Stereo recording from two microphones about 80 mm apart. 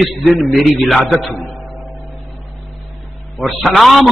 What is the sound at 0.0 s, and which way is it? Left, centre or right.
A man's voice, centre.